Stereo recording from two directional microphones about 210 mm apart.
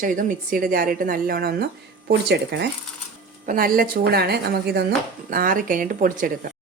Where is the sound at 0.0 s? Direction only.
40° right (ahead or behind).